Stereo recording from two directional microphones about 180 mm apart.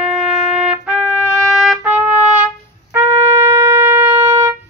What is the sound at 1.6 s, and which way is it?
Trumpet, 5° right (ahead or behind).